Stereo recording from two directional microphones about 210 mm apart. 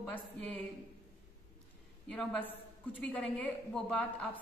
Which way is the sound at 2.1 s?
5° left (ahead or behind).